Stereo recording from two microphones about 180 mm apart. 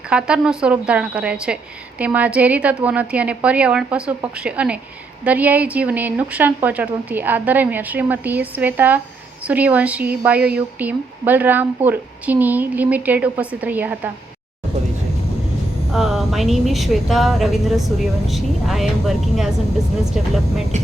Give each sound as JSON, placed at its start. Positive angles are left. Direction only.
{"t": 0.1, "sound": "a woman's voice", "side_deg": -5}
{"t": 15.9, "sound": "a woman's voice", "side_deg": 0}
{"t": 20.7, "sound": "speech", "side_deg": -40}